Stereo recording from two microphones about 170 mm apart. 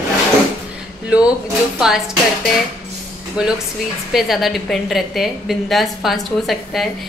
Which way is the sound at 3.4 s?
5° right (ahead or behind).